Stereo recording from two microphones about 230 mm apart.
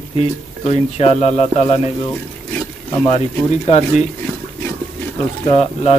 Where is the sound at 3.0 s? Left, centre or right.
Left.